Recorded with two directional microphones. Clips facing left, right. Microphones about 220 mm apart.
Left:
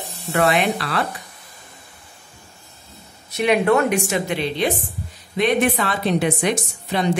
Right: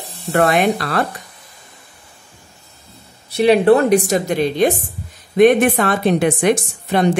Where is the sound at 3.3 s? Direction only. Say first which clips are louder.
Right 6 dB; 35° right (ahead or behind).